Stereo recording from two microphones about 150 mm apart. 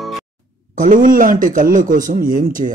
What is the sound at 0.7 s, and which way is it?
Speech, 60° right (ahead or behind).